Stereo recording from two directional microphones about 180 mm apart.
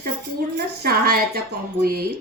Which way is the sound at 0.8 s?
55° right (ahead or behind).